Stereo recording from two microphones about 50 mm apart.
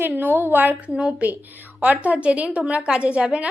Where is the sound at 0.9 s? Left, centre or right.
Right.